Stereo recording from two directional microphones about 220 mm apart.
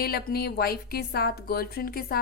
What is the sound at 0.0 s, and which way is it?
Speech, 45° left (ahead or behind).